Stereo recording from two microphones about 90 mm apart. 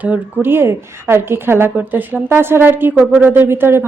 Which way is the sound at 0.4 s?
25° right (ahead or behind).